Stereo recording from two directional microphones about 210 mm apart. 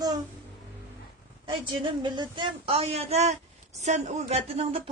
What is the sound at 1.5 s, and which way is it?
Speech, 20° right (ahead or behind).